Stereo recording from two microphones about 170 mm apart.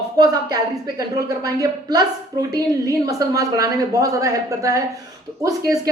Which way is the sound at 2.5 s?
20° right (ahead or behind).